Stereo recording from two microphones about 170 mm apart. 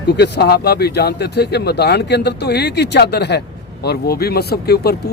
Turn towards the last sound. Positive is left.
turn(degrees=70)  # may be behind; listen again after turning